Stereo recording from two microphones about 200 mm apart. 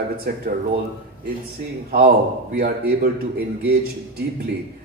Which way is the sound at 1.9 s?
50° right (ahead or behind).